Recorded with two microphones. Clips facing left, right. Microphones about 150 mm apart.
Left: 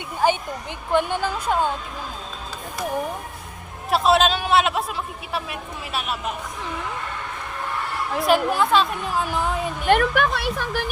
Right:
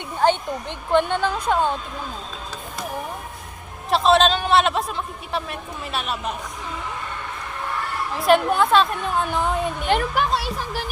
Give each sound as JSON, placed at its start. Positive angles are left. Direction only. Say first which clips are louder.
{"t": 0.9, "sound": "speech", "louder": "right 2 dB", "side_deg": 10}
{"t": 3.8, "sound": "a woman's voice", "louder": "right 1 dB", "side_deg": 5}
{"t": 8.3, "sound": "a woman's voice", "louder": "right 2 dB", "side_deg": 0}
{"t": 9.8, "sound": "a woman's voice", "louder": "left 5 dB", "side_deg": 60}